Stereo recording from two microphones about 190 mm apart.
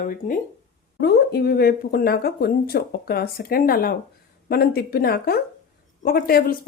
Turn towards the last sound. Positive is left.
turn(degrees=50)  # may be behind; listen again after turning